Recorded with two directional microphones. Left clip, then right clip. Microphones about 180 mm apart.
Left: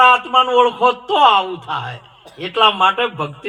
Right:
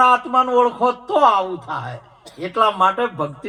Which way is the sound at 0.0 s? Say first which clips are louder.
Left 3 dB; 20° right (ahead or behind).